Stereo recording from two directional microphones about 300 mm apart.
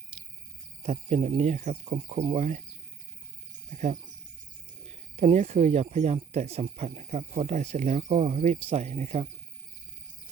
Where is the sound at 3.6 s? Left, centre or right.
Right.